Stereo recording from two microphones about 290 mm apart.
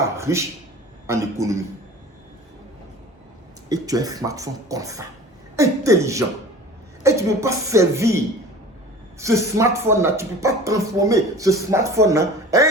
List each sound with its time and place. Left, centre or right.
0.2 s speech: centre
3.7 s speech: centre